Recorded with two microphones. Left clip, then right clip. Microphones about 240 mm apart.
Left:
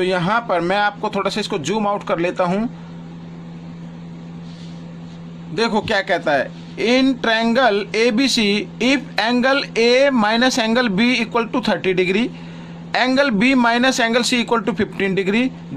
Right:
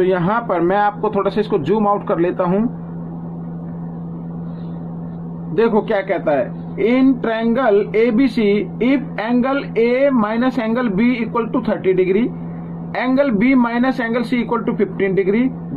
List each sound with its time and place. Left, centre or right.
0.0 s a man's voice: left
5.6 s a man's voice: left